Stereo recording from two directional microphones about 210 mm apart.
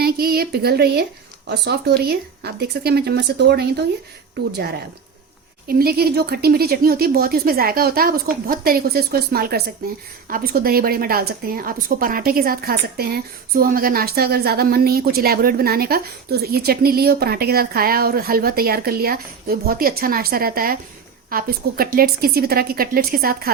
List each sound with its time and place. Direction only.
0.0 s a woman's voice: 45° right (ahead or behind)
5.6 s a woman's voice: 45° right (ahead or behind)